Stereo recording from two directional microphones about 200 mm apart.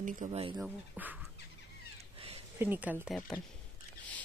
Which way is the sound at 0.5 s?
5° right (ahead or behind).